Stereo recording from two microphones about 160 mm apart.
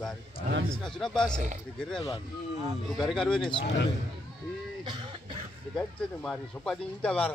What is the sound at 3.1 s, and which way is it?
Speech, 5° left (ahead or behind).